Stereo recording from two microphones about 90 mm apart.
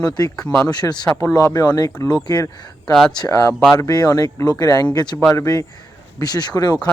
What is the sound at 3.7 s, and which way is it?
Speech, 45° left (ahead or behind).